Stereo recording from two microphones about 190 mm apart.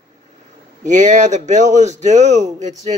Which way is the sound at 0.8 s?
40° right (ahead or behind).